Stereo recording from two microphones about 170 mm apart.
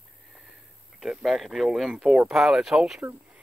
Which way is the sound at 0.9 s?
Centre (ahead or behind).